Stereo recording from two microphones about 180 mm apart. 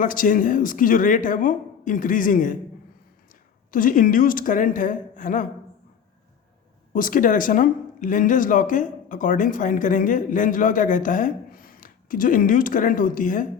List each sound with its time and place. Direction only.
0.0 s speech: 45° left (ahead or behind)
3.7 s speech: 50° left (ahead or behind)
6.9 s speech: 50° left (ahead or behind)